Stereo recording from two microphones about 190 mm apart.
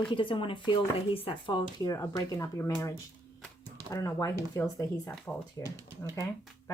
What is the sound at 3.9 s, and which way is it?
Speech, 20° left (ahead or behind).